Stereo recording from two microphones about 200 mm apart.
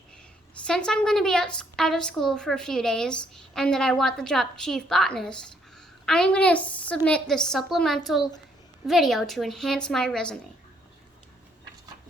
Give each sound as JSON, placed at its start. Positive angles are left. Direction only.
{"t": 0.6, "sound": "a woman's voice", "side_deg": 5}